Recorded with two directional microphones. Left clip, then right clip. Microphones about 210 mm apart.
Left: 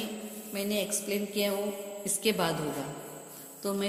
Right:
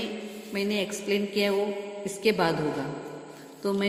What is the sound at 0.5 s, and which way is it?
A woman's voice, 30° right (ahead or behind).